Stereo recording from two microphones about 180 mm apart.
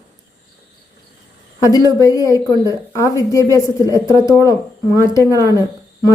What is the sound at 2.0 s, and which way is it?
A woman's voice, 20° left (ahead or behind).